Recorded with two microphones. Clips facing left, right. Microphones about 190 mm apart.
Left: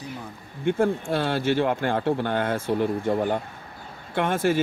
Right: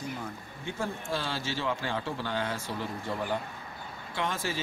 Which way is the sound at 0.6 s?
60° left (ahead or behind).